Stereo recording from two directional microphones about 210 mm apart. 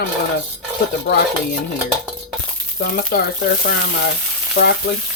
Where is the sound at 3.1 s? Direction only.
45° left (ahead or behind).